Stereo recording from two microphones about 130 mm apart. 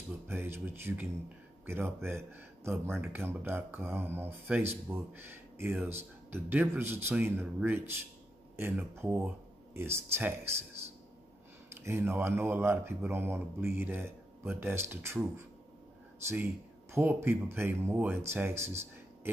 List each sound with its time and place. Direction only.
0.3 s speech: 20° right (ahead or behind)
11.8 s speech: 20° right (ahead or behind)
16.9 s speech: 15° right (ahead or behind)